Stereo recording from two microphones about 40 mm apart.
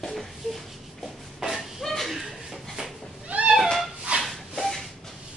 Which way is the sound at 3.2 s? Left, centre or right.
Right.